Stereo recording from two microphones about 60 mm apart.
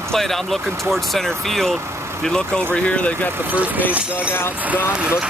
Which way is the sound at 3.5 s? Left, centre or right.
Right.